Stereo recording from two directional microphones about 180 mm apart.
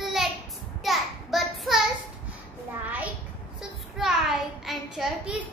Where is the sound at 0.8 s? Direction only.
Centre (ahead or behind).